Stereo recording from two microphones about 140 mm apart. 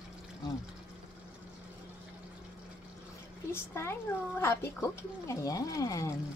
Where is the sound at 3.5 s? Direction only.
15° left (ahead or behind).